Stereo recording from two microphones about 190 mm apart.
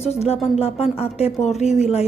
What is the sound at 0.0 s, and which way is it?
A woman's voice, 35° left (ahead or behind).